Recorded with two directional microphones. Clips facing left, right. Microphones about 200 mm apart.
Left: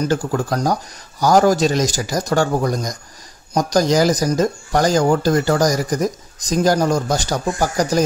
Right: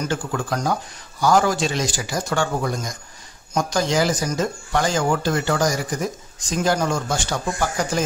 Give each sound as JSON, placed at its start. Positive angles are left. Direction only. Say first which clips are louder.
{"t": 0.0, "sound": "speech", "louder": "left 6 dB", "side_deg": 40}